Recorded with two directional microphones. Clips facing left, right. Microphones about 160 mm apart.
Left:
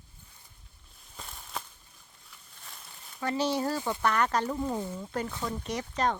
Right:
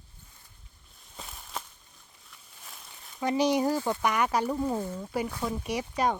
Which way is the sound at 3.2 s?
15° right (ahead or behind).